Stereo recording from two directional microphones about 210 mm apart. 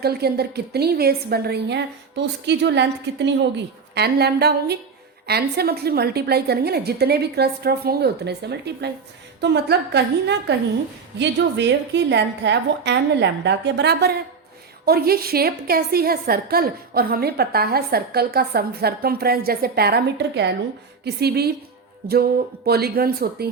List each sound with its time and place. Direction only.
0.0 s a woman's voice: 50° right (ahead or behind)